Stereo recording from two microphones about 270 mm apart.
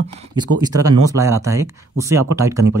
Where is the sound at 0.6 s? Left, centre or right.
Centre.